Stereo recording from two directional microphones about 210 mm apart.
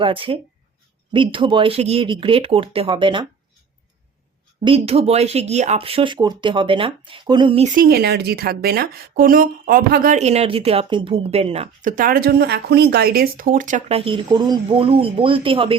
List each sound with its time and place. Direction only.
0.0 s speech: 25° right (ahead or behind)
4.6 s speech: 25° right (ahead or behind)
7.8 s speech: 50° right (ahead or behind); by 15.8 s 25° right (ahead or behind)